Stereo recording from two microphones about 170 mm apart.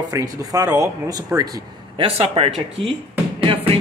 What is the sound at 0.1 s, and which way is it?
Speech, 20° right (ahead or behind).